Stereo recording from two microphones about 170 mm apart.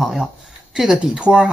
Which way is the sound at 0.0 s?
Centre (ahead or behind).